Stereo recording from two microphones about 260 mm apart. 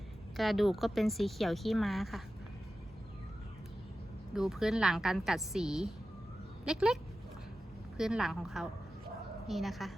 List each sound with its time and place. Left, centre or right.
0.3 s speech: centre
4.4 s speech: centre